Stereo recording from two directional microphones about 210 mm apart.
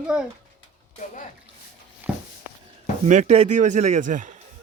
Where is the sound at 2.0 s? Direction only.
10° right (ahead or behind).